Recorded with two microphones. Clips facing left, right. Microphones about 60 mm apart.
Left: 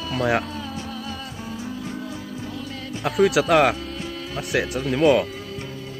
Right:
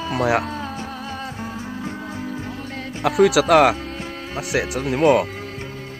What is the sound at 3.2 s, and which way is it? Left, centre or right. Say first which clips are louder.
Speech: right 1 dB; right.